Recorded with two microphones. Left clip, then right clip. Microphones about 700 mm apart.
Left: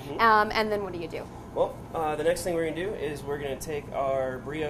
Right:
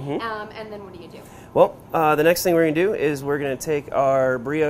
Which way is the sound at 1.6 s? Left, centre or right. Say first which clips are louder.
Right 11 dB; right.